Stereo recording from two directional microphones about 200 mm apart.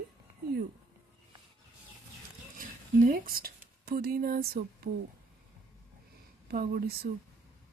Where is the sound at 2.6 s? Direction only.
45° right (ahead or behind).